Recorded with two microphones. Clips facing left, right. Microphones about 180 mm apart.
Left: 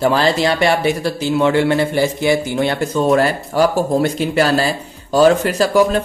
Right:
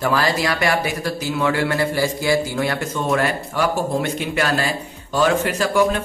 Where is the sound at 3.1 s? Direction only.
35° left (ahead or behind).